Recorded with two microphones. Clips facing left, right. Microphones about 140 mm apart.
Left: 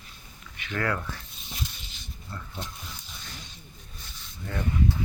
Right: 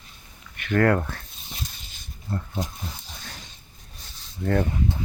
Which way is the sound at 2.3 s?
40° right (ahead or behind).